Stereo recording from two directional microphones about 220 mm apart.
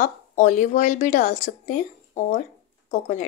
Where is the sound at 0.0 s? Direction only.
35° left (ahead or behind).